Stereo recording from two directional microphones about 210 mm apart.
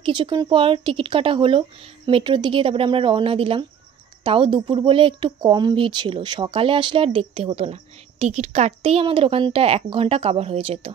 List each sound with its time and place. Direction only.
0.0 s speech: 20° right (ahead or behind)